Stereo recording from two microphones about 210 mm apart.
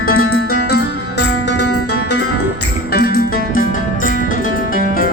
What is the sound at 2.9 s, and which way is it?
Music, 45° left (ahead or behind).